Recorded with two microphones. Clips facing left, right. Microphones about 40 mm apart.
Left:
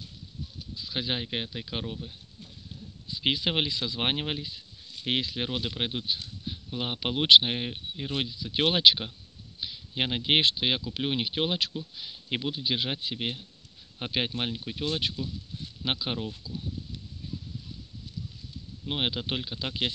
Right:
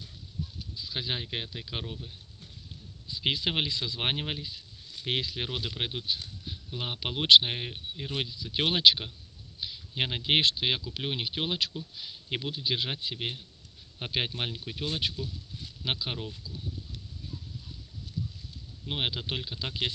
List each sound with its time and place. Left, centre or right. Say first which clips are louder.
0.7 s speech: left 3 dB; centre
16.3 s speech: left 4 dB; left
17.2 s a sound: left 4 dB; left
18.9 s speech: left 2 dB; centre